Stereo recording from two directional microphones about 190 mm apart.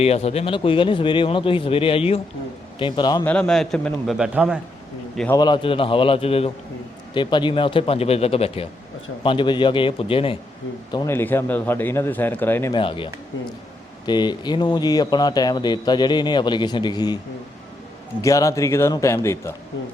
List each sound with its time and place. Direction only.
0.0 s speech: 30° left (ahead or behind)
3.2 s a man's voice: 5° left (ahead or behind)
5.3 s speech: 20° left (ahead or behind)
10.9 s a man's voice: 15° left (ahead or behind)
12.7 s speech: 25° left (ahead or behind)
18.2 s a man's voice: 15° left (ahead or behind)